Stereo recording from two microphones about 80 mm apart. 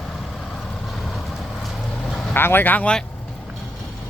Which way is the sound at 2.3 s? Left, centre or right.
Left.